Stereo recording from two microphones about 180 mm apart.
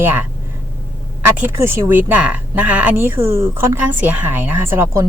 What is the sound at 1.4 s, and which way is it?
Speech, 10° right (ahead or behind).